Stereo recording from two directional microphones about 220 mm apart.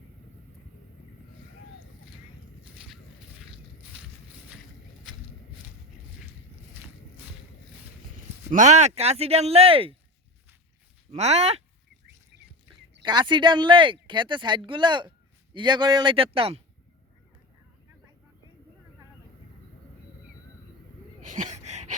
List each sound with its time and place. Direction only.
8.4 s speech: 30° right (ahead or behind)
11.1 s speech: 30° right (ahead or behind)
13.0 s speech: 20° right (ahead or behind)
21.2 s a sound: 35° right (ahead or behind)